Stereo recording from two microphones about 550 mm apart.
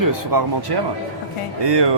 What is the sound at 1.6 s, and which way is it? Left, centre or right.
Speech, right.